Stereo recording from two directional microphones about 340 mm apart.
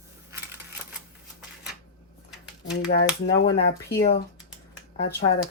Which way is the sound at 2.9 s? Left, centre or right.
Left.